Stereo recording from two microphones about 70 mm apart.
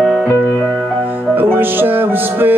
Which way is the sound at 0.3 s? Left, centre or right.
Left.